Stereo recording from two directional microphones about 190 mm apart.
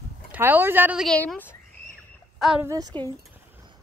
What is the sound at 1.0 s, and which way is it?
Speech, 5° left (ahead or behind).